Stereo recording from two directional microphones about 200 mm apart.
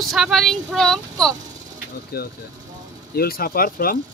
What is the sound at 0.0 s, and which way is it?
Speech, centre (ahead or behind).